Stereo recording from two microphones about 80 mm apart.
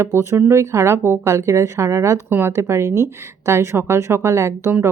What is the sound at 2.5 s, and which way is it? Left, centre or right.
Speech, right.